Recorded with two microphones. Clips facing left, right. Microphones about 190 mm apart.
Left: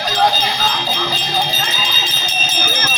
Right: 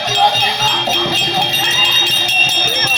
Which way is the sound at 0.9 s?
70° right (ahead or behind).